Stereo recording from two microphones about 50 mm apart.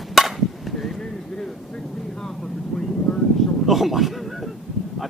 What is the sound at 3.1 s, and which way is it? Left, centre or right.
Vehicle, centre.